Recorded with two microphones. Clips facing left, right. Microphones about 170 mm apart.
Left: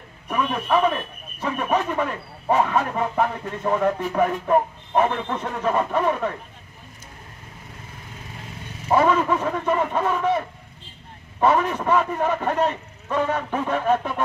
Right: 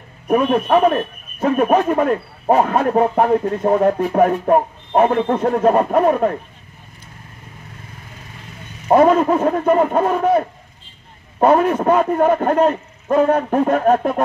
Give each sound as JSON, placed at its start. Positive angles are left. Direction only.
{"t": 0.3, "sound": "speech", "side_deg": -40}
{"t": 8.8, "sound": "a man's voice", "side_deg": -40}